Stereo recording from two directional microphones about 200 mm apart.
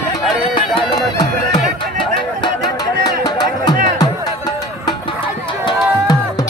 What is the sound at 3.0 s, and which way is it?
Music, 20° left (ahead or behind).